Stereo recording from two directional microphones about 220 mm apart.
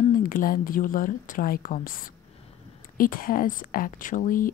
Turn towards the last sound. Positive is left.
turn(degrees=35)  # may be behind; listen again after turning